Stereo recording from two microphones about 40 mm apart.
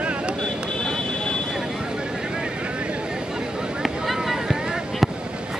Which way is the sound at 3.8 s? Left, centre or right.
Centre.